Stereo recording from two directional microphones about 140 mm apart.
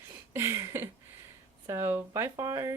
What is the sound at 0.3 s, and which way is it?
A woman's voice, 20° right (ahead or behind).